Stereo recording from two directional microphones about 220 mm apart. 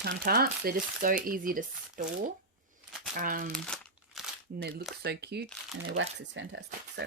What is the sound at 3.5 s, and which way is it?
Crumpling, centre (ahead or behind).